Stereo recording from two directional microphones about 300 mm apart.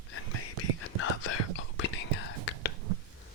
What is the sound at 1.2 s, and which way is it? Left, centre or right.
Whispering, left.